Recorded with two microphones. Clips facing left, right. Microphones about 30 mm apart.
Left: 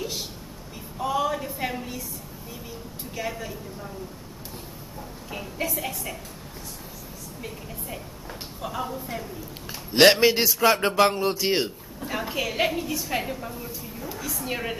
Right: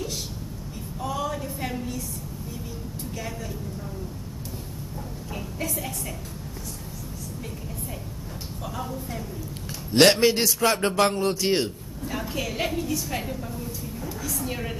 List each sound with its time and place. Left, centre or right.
0.9 s a sound: centre
3.2 s speech: centre
5.7 s speech: centre
8.6 s a woman's voice: centre